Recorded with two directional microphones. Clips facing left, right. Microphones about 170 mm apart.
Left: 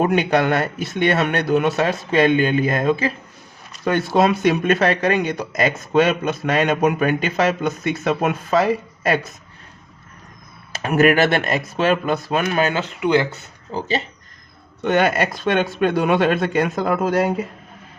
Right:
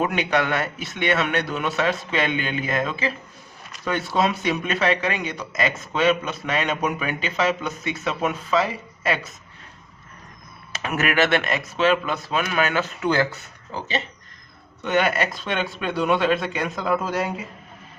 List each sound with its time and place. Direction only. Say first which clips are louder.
0.0 s speech: left 5 dB; 40° left (ahead or behind)
10.8 s speech: left 6 dB; 40° left (ahead or behind)
12.5 s speech: left 3 dB; 30° left (ahead or behind)
13.0 s speech: left 5 dB; 15° left (ahead or behind)
13.7 s speech: left 5 dB; 35° left (ahead or behind)
15.4 s speech: left 8 dB; 50° left (ahead or behind)